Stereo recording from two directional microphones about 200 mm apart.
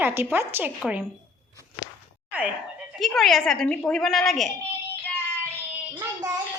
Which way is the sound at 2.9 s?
Centre (ahead or behind).